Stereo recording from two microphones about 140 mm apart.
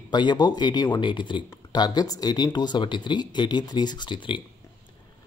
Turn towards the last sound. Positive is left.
turn(degrees=35)  # may be behind; listen again after turning